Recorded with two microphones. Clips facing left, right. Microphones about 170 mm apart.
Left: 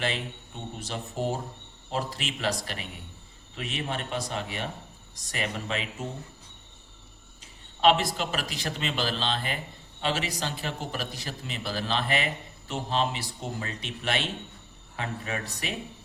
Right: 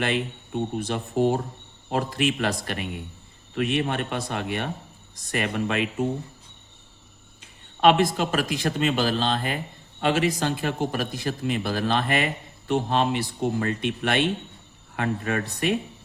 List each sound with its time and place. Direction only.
0.8 s a man's voice: 60° right (ahead or behind)
7.8 s a man's voice: 55° right (ahead or behind)